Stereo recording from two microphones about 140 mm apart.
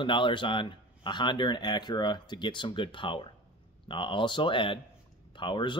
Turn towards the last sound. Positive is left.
turn(degrees=35)  # may be behind; listen again after turning